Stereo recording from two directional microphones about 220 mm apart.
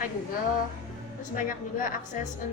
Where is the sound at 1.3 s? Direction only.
40° left (ahead or behind).